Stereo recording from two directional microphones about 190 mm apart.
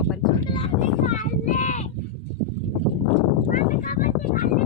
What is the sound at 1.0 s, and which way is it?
Speech, 40° left (ahead or behind).